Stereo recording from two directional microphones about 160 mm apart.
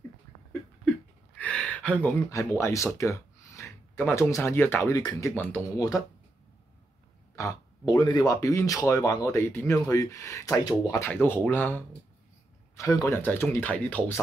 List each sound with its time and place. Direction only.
1.4 s speech: 10° left (ahead or behind)
7.3 s speech: 20° left (ahead or behind)